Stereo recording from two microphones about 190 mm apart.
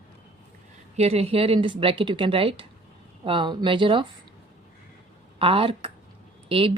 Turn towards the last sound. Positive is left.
turn(degrees=-30)  # may be behind; listen again after turning